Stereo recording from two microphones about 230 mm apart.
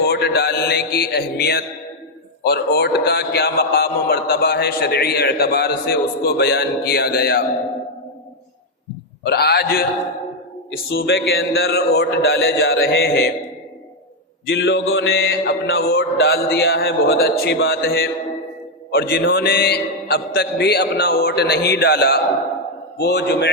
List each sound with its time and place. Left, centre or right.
0.0 s a man's voice: left
9.2 s a man's voice: left
10.8 s a man's voice: left
14.5 s a man's voice: left